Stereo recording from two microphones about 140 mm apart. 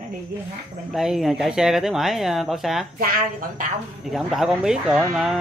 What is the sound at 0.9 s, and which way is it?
Speech, 5° right (ahead or behind).